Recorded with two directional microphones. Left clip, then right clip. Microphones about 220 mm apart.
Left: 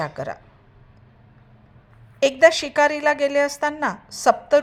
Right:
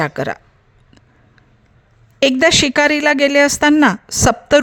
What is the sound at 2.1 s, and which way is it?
Speech, 35° right (ahead or behind).